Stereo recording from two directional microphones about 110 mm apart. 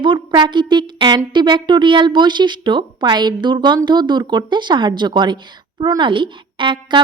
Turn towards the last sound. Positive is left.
turn(degrees=-45)  # may be behind; listen again after turning